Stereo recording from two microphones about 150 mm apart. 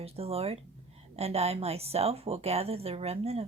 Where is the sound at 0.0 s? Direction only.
40° right (ahead or behind).